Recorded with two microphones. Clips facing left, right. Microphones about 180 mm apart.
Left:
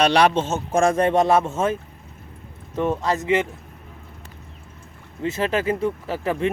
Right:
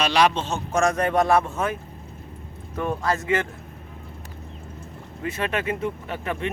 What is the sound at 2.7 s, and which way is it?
Speech, 20° left (ahead or behind).